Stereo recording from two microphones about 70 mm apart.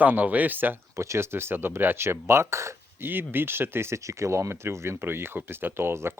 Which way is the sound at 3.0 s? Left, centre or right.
Right.